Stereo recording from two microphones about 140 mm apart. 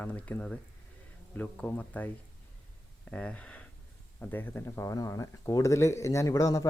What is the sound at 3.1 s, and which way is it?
Speech, 10° left (ahead or behind).